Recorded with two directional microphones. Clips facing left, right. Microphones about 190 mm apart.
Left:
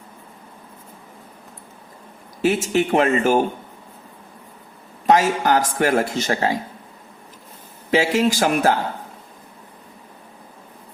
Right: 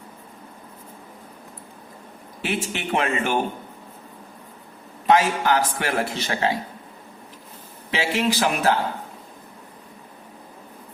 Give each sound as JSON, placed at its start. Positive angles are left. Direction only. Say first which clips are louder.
{"t": 2.4, "sound": "speech", "louder": "left 9 dB", "side_deg": 40}
{"t": 5.0, "sound": "speech", "louder": "left 2 dB", "side_deg": 45}
{"t": 7.9, "sound": "speech", "louder": "left 5 dB", "side_deg": 40}